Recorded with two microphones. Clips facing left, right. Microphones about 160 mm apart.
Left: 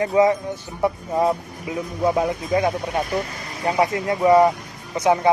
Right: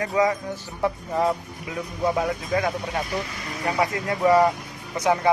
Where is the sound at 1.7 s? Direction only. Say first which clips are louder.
Left 4 dB; 20° left (ahead or behind).